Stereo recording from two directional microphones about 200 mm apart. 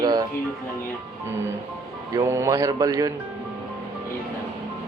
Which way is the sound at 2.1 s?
15° right (ahead or behind).